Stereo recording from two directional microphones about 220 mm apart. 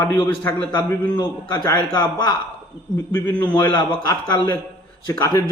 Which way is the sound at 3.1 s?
15° left (ahead or behind).